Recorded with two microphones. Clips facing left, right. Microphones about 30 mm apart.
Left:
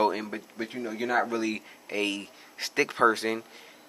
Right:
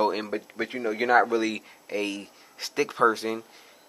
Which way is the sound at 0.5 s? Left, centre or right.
Right.